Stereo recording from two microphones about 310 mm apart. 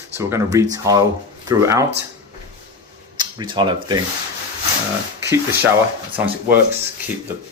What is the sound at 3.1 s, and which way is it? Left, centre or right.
Speech, centre.